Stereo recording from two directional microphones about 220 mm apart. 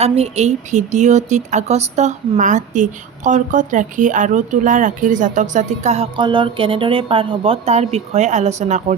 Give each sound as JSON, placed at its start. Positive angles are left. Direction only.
{"t": 0.0, "sound": "speech", "side_deg": -30}